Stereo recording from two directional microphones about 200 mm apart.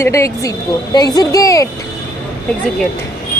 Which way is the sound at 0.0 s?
15° left (ahead or behind).